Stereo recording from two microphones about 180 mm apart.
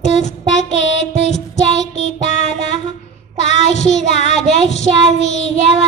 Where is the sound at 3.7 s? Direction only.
40° left (ahead or behind).